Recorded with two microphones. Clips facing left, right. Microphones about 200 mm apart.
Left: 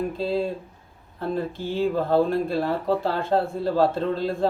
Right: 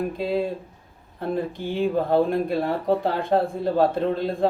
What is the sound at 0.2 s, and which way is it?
Speech, 15° right (ahead or behind).